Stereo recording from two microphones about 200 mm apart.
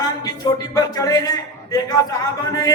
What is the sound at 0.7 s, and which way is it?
A man's voice, 15° left (ahead or behind).